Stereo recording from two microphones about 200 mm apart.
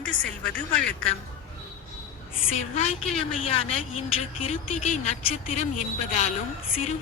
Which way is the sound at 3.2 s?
30° left (ahead or behind).